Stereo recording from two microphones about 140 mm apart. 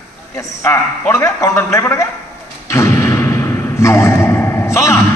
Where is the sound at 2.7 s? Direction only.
20° left (ahead or behind).